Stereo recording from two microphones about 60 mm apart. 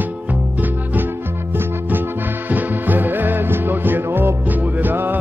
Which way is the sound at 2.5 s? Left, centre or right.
Right.